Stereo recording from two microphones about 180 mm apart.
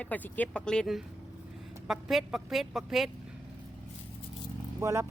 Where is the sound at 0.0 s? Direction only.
10° left (ahead or behind).